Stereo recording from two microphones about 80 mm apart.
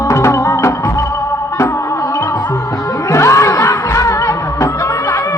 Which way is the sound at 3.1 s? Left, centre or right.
Left.